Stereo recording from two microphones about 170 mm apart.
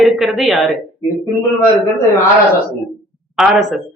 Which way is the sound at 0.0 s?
Centre (ahead or behind).